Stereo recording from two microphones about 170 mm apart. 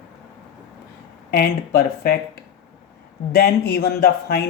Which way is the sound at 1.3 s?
65° left (ahead or behind).